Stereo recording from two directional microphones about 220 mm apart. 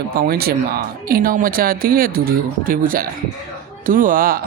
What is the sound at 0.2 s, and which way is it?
Speech, 45° right (ahead or behind).